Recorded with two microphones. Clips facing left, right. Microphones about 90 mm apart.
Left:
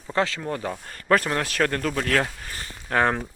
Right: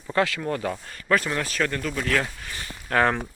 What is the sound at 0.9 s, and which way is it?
Speech, 40° left (ahead or behind).